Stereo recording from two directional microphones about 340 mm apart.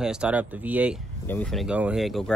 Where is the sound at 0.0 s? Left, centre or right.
Centre.